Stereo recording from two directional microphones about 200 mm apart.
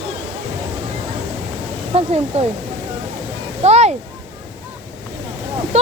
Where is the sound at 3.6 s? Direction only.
35° right (ahead or behind).